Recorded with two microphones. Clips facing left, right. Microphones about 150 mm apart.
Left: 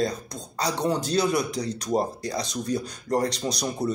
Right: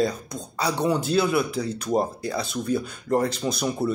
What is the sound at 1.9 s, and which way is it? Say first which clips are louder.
Speech: right 2 dB; 5° right (ahead or behind).